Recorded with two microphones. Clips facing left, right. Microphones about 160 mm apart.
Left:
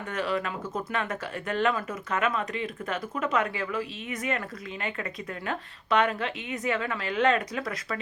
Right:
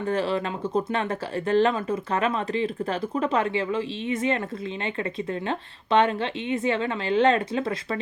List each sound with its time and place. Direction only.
0.1 s speech: 30° right (ahead or behind)
5.5 s speech: 30° right (ahead or behind)